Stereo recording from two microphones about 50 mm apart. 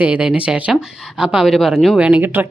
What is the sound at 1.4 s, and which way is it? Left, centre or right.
Speech, centre.